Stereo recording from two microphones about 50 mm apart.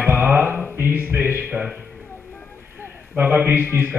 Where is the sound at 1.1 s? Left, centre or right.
Right.